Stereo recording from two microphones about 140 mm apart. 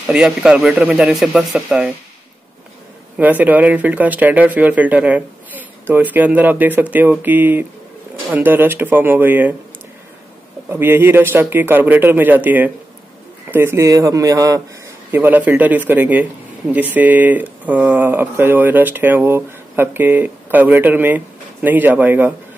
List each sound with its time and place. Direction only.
0.0 s speech: 5° right (ahead or behind)
3.2 s speech: 10° right (ahead or behind)
10.7 s a man's voice: 15° right (ahead or behind)
15.0 s speech: 15° right (ahead or behind)